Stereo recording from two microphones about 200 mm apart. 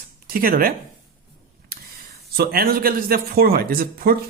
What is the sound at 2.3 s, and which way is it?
Speech, 50° right (ahead or behind).